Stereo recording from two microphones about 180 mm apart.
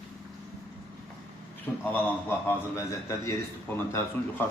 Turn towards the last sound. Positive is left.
turn(degrees=10)  # may be behind; listen again after turning